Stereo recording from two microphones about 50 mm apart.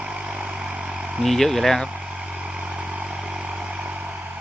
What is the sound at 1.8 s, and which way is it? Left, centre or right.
Vehicle, right.